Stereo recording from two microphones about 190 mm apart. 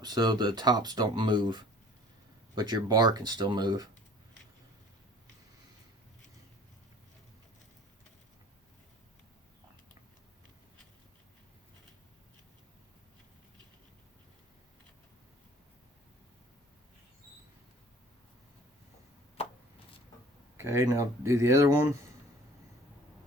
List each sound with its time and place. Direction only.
0.0 s speech: 20° right (ahead or behind)
20.6 s speech: 15° right (ahead or behind)